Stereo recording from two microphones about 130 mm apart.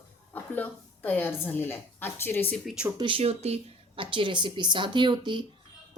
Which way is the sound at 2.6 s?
5° right (ahead or behind).